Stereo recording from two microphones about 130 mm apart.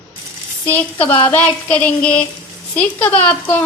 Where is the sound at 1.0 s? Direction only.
40° left (ahead or behind).